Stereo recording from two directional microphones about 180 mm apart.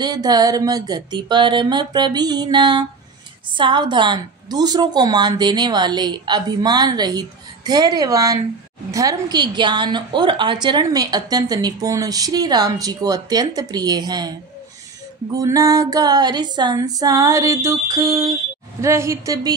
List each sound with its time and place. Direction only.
0.0 s a woman's voice: 20° right (ahead or behind)
15.3 s a woman's voice: 20° right (ahead or behind)